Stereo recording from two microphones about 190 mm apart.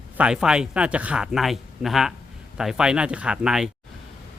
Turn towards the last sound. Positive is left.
turn(degrees=-5)  # may be behind; listen again after turning